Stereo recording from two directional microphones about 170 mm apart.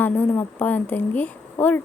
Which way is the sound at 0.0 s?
10° left (ahead or behind).